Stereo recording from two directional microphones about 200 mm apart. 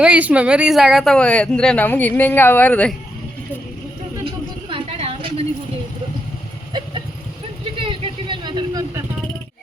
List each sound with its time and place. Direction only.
0.0 s speech: 5° right (ahead or behind)
4.7 s a sound: 25° right (ahead or behind)
6.7 s vehicle: 20° right (ahead or behind)